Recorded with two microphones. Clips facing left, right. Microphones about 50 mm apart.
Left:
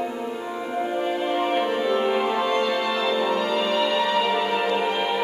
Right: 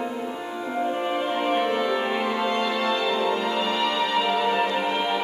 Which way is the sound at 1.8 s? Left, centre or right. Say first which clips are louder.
Left 2 dB; centre.